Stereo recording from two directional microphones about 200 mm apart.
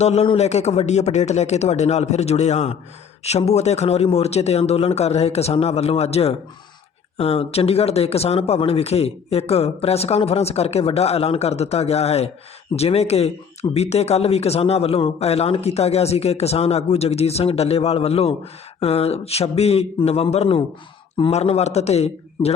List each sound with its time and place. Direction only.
0.0 s speech: 30° left (ahead or behind)